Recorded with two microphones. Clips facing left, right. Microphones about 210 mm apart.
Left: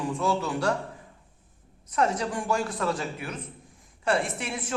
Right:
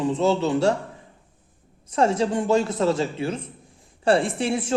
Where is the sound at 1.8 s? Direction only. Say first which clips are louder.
Right 6 dB; 30° right (ahead or behind).